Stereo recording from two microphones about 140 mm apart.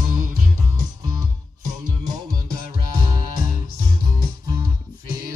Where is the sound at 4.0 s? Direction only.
30° right (ahead or behind).